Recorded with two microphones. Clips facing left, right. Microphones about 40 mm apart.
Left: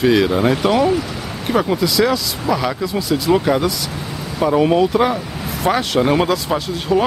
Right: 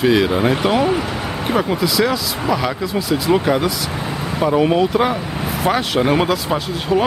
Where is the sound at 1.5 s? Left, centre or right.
Centre.